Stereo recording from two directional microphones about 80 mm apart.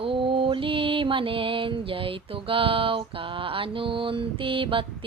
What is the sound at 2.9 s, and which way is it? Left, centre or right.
Mantra, right.